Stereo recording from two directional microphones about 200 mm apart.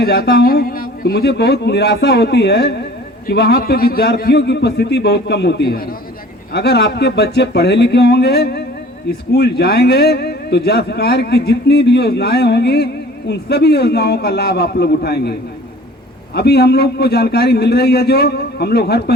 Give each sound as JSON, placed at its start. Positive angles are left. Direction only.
{"t": 0.0, "sound": "a man's voice", "side_deg": 55}